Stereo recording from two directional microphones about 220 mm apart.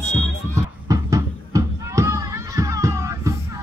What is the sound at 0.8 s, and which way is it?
Music, 15° right (ahead or behind).